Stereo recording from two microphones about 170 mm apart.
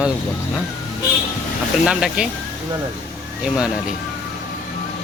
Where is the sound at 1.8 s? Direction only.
5° right (ahead or behind).